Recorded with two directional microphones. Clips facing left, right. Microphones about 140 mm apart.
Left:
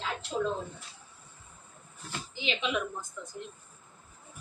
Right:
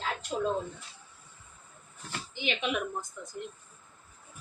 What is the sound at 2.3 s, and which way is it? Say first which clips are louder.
Speech: right 1 dB; 55° right (ahead or behind).